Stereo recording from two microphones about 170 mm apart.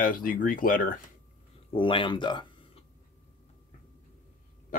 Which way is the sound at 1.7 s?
30° left (ahead or behind).